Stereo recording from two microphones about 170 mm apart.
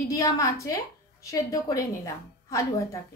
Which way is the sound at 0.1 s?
20° left (ahead or behind).